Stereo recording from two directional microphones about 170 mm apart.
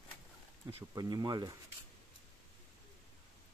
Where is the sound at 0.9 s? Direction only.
20° right (ahead or behind).